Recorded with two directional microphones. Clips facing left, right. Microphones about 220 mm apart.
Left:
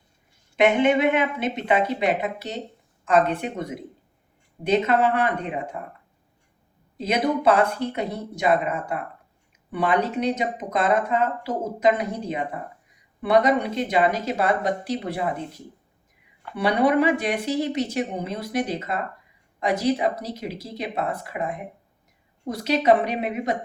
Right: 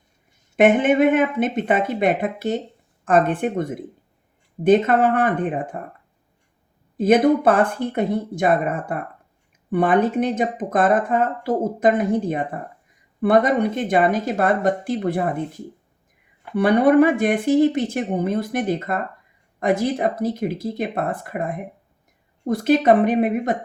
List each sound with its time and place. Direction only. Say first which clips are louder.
0.5 s speech: right 3 dB; 50° right (ahead or behind)
6.9 s speech: right 8 dB; 50° right (ahead or behind)
16.6 s speech: right 6 dB; 50° right (ahead or behind)